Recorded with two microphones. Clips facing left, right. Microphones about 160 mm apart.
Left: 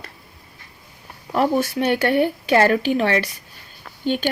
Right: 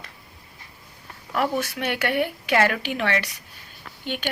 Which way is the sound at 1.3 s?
30° left (ahead or behind).